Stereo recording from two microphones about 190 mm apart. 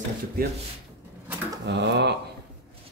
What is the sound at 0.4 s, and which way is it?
Speech, 55° right (ahead or behind).